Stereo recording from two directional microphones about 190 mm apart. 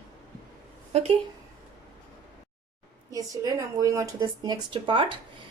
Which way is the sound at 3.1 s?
20° right (ahead or behind).